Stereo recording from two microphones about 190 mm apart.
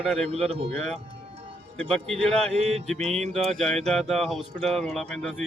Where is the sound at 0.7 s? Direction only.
Centre (ahead or behind).